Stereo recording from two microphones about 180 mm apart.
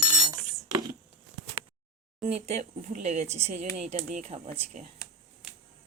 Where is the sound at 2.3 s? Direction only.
35° right (ahead or behind).